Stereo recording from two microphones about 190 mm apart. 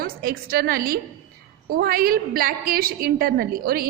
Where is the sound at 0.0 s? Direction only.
50° right (ahead or behind).